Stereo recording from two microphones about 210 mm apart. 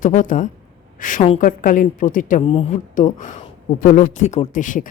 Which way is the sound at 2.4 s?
25° left (ahead or behind).